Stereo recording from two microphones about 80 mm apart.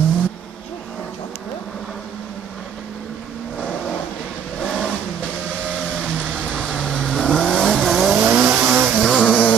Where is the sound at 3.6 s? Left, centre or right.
Centre.